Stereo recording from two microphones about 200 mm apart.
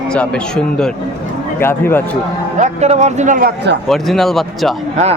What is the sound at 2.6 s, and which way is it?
A man's voice, 35° right (ahead or behind).